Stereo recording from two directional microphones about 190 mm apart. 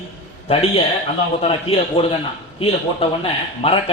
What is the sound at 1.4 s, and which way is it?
Speech, 30° left (ahead or behind).